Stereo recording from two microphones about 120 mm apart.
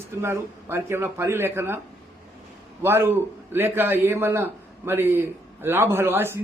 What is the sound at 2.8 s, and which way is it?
A man's voice, 20° right (ahead or behind).